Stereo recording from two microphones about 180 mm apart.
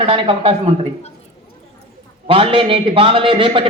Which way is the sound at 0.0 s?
30° right (ahead or behind).